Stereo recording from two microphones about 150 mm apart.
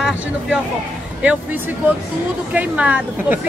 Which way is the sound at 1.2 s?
10° right (ahead or behind).